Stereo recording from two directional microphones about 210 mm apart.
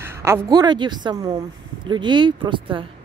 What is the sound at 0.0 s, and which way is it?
Speech, 10° right (ahead or behind).